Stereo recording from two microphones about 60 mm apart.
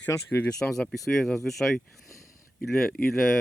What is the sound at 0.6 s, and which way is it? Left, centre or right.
Speech, left.